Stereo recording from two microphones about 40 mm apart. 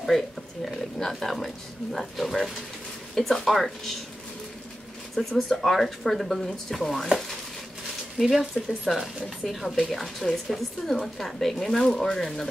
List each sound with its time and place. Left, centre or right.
0.7 s speech: centre
5.2 s speech: centre
5.5 s speech: centre
8.2 s a woman's voice: centre